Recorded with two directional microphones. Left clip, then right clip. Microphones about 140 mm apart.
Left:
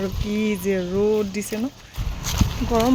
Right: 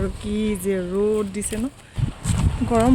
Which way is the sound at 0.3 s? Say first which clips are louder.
Left 1 dB; 5° left (ahead or behind).